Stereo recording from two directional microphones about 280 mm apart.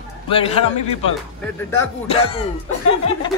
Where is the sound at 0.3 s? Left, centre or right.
Left.